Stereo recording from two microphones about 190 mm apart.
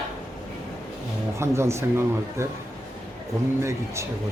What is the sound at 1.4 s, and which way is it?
Speech, 15° right (ahead or behind).